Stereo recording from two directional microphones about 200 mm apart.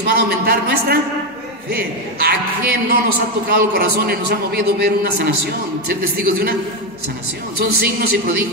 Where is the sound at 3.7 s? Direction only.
50° right (ahead or behind).